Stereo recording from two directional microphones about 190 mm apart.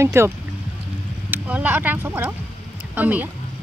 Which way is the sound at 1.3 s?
10° right (ahead or behind).